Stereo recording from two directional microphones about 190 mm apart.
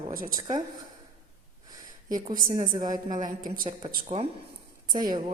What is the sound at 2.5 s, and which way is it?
Speech, 20° right (ahead or behind).